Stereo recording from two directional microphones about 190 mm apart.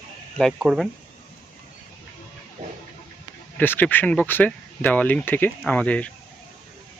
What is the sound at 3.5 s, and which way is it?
Speech, 10° left (ahead or behind).